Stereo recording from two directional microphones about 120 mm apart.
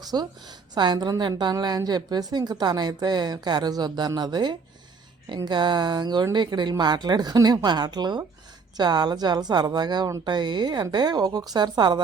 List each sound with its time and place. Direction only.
0.0 s a woman's voice: 35° right (ahead or behind)